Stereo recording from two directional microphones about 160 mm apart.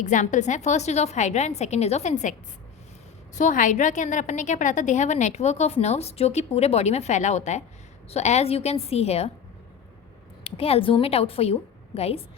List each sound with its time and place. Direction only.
0.0 s a woman's voice: 50° left (ahead or behind)
3.3 s a woman's voice: 55° left (ahead or behind)
10.4 s a woman's voice: 35° left (ahead or behind)